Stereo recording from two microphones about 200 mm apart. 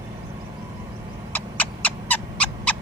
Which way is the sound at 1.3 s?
10° left (ahead or behind).